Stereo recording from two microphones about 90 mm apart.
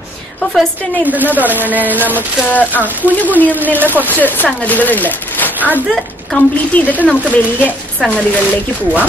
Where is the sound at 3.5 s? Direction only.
20° right (ahead or behind).